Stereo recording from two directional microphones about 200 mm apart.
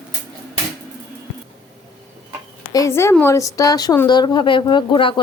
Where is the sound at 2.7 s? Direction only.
15° left (ahead or behind).